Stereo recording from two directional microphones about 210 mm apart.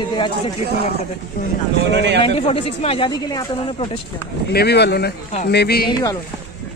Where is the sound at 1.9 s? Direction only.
55° right (ahead or behind).